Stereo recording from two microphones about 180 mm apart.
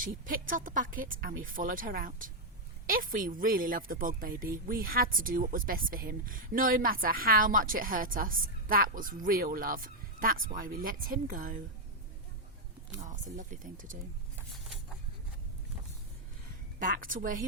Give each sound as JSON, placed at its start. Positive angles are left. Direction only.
{"t": 0.0, "sound": "speech", "side_deg": -50}
{"t": 13.0, "sound": "speech", "side_deg": -45}
{"t": 16.8, "sound": "speech", "side_deg": -50}